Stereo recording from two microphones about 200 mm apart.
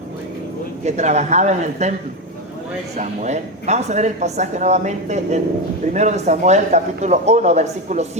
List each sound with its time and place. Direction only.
0.9 s speech: 35° right (ahead or behind)
3.0 s speech: 35° right (ahead or behind)